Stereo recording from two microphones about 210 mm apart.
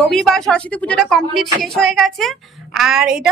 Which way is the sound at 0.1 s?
Centre (ahead or behind).